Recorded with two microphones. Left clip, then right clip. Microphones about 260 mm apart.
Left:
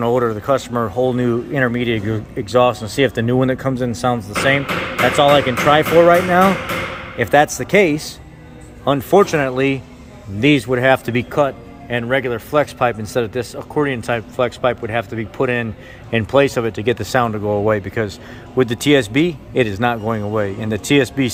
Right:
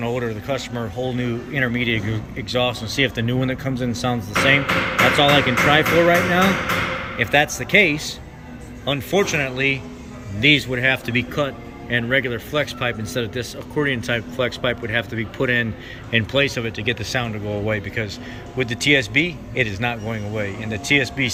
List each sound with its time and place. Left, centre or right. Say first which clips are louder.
0.2 s a man's voice: left 8 dB; left